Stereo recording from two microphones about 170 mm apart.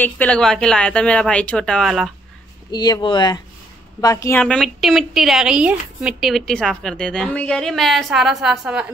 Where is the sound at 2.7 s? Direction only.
25° left (ahead or behind).